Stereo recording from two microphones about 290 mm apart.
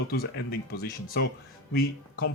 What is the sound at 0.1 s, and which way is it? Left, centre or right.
Speech, left.